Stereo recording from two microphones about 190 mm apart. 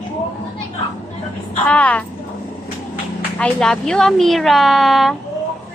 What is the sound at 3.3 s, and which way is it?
Speech, 5° left (ahead or behind).